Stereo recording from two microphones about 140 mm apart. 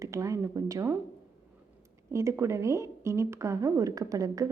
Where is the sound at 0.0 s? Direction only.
20° right (ahead or behind).